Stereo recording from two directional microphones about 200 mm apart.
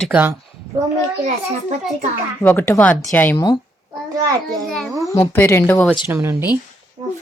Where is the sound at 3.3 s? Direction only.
20° left (ahead or behind).